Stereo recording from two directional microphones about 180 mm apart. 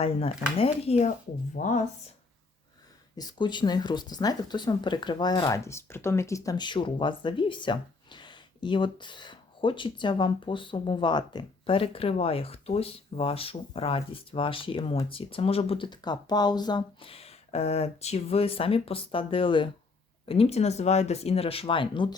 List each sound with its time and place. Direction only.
0.0 s speech: 35° left (ahead or behind)
3.2 s speech: 25° left (ahead or behind)